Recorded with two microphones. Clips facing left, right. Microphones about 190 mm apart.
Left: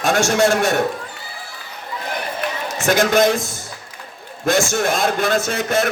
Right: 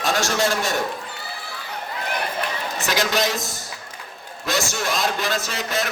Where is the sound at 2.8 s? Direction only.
50° left (ahead or behind).